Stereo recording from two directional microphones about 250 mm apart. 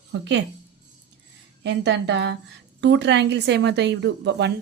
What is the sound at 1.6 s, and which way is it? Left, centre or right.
A woman's voice, right.